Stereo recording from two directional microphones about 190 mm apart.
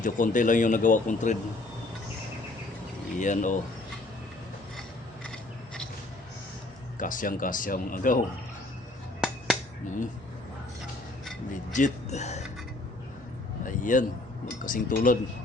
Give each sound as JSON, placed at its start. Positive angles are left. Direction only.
{"t": 0.0, "sound": "speech", "side_deg": 45}
{"t": 3.2, "sound": "speech", "side_deg": 40}
{"t": 5.2, "sound": "filing", "side_deg": 5}
{"t": 7.0, "sound": "speech", "side_deg": 45}
{"t": 11.7, "sound": "speech", "side_deg": 40}
{"t": 13.7, "sound": "a sound", "side_deg": 45}
{"t": 14.6, "sound": "speech", "side_deg": 45}